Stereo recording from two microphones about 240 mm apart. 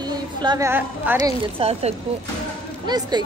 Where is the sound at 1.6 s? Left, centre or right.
Right.